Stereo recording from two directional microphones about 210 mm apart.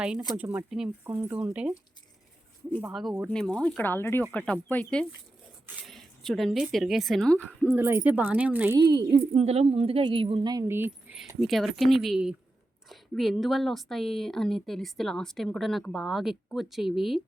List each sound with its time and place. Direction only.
0.3 s speech: 5° right (ahead or behind)
2.8 s a woman's voice: centre (ahead or behind)
7.8 s speech: 10° right (ahead or behind)
8.8 s a woman's voice: 20° right (ahead or behind); by 17.2 s centre (ahead or behind)